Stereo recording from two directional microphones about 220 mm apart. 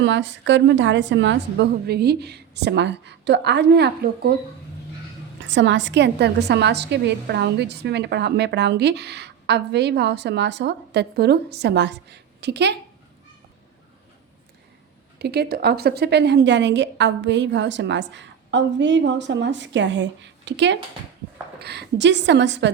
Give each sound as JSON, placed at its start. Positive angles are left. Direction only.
{"t": 0.0, "sound": "a woman's voice", "side_deg": -55}
{"t": 5.4, "sound": "a woman's voice", "side_deg": -55}
{"t": 15.2, "sound": "a woman's voice", "side_deg": -45}